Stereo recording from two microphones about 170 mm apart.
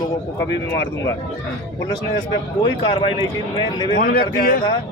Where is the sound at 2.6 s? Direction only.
30° left (ahead or behind).